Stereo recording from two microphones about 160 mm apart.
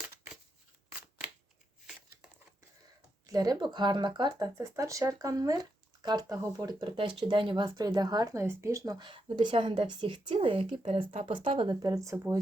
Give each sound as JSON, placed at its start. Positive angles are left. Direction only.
{"t": 3.2, "sound": "speech", "side_deg": -25}